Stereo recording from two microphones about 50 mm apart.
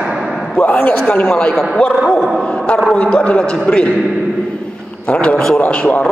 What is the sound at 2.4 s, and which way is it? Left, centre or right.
A man's voice, left.